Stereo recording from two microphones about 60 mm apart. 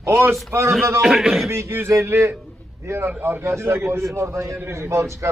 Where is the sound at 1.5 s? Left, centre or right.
Right.